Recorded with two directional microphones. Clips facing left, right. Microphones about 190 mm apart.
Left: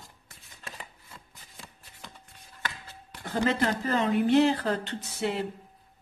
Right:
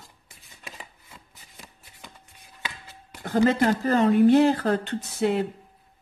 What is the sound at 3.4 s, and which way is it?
Speech, 45° right (ahead or behind).